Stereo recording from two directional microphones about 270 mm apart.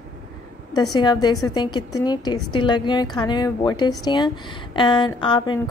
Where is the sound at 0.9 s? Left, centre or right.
Centre.